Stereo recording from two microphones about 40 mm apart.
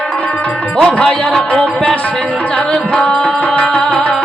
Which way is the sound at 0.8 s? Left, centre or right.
Left.